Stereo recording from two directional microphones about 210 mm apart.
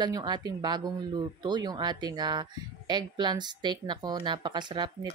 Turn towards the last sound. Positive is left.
turn(degrees=-20)  # may be behind; listen again after turning